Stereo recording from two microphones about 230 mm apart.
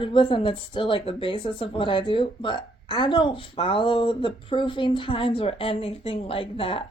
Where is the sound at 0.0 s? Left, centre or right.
Left.